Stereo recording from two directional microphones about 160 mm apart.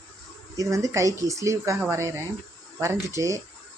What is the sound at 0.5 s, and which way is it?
Speech, 20° right (ahead or behind).